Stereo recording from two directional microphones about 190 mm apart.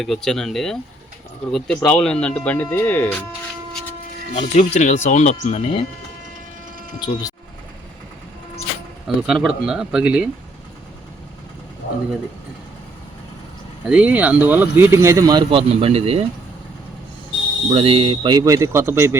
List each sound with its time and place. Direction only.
0.0 s speech: centre (ahead or behind)
4.4 s speech: 40° left (ahead or behind)
7.0 s speech: 20° left (ahead or behind)
9.0 s speech: centre (ahead or behind)
13.8 s speech: 5° right (ahead or behind); by 16.2 s 30° right (ahead or behind)
17.7 s speech: 30° right (ahead or behind); by 19.1 s 15° right (ahead or behind)